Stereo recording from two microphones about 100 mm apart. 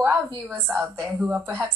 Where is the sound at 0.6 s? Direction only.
20° right (ahead or behind).